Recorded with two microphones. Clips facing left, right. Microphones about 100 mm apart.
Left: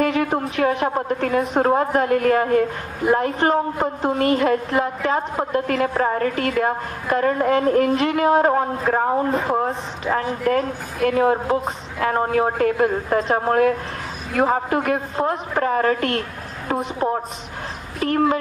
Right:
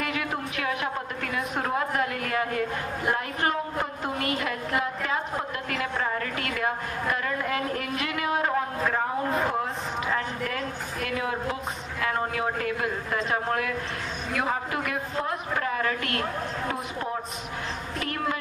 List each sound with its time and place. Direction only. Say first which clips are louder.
0.0 s a woman's voice: left 10 dB; 35° left (ahead or behind)